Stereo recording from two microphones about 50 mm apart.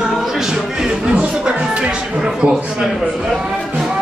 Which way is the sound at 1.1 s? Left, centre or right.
Right.